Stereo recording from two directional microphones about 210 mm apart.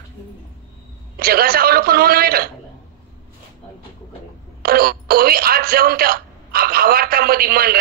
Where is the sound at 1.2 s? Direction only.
45° right (ahead or behind).